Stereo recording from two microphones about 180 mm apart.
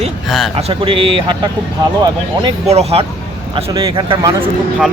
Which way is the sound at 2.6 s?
35° right (ahead or behind).